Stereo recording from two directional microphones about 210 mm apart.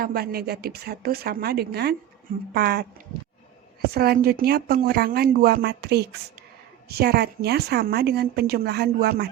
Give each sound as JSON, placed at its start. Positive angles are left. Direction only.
{"t": 0.0, "sound": "a woman's voice", "side_deg": -45}
{"t": 3.8, "sound": "a woman's voice", "side_deg": -50}